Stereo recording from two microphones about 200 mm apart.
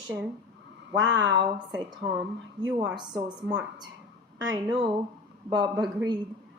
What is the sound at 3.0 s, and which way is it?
A woman's voice, 20° right (ahead or behind).